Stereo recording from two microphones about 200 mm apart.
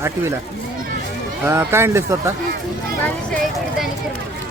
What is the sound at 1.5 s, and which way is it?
Speech, 10° right (ahead or behind).